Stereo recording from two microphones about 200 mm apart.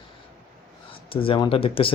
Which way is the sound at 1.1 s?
25° left (ahead or behind).